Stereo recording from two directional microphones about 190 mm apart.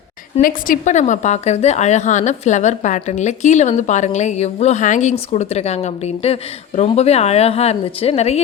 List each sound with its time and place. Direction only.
0.4 s a woman's voice: 40° left (ahead or behind)